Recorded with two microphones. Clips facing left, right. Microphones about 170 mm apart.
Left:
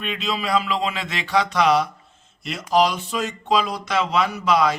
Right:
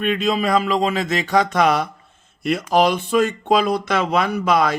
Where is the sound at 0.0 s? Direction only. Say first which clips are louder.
Right 7 dB; 50° right (ahead or behind).